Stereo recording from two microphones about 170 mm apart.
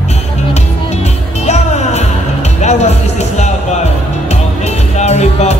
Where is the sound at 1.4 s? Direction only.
40° left (ahead or behind).